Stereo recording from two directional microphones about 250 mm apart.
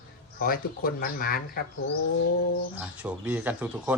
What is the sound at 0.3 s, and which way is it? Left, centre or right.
Speech, left.